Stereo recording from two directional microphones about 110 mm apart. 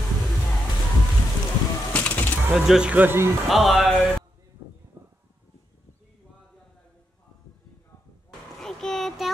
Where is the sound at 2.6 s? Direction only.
10° right (ahead or behind).